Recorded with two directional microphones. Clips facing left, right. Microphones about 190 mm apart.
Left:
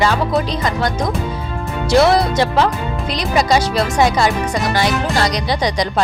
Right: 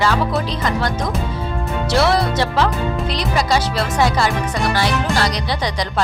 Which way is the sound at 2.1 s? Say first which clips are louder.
Left 3 dB; 15° left (ahead or behind).